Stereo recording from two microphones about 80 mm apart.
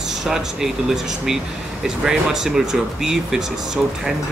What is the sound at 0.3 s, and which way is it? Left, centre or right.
Speech, centre.